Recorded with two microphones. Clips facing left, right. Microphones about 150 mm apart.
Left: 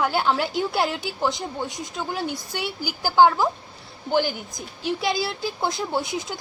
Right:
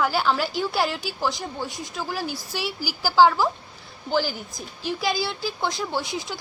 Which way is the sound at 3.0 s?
20° left (ahead or behind).